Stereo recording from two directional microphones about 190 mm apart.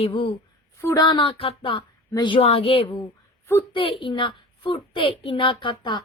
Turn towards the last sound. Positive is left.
turn(degrees=25)  # may be behind; listen again after turning